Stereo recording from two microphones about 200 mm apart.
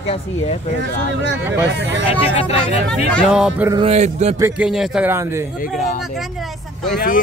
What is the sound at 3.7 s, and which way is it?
Speech, 30° right (ahead or behind).